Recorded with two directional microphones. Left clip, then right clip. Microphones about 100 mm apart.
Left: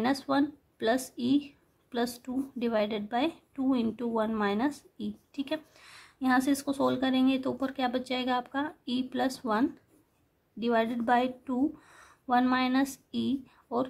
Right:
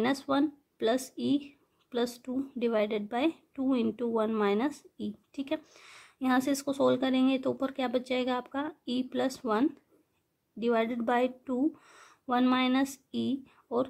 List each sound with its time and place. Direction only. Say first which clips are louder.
0.0 s a woman's voice: even; 20° right (ahead or behind)